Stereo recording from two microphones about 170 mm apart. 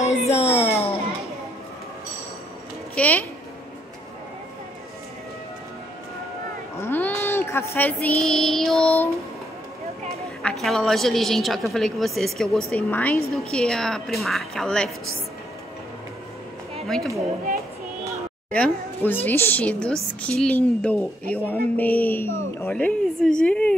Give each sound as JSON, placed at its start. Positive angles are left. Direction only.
{"t": 0.0, "sound": "a sound", "side_deg": 40}
{"t": 3.0, "sound": "a woman's voice", "side_deg": 10}
{"t": 6.8, "sound": "child singing", "side_deg": 15}
{"t": 10.4, "sound": "a woman's voice", "side_deg": 0}
{"t": 16.8, "sound": "speech", "side_deg": 0}
{"t": 18.5, "sound": "a woman's voice", "side_deg": 10}